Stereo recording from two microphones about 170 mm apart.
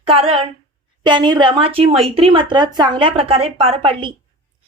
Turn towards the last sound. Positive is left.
turn(degrees=-30)  # may be behind; listen again after turning